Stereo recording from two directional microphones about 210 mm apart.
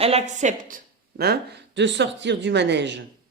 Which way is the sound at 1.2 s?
55° right (ahead or behind).